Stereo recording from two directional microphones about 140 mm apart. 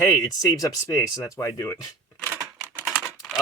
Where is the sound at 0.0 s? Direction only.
25° left (ahead or behind).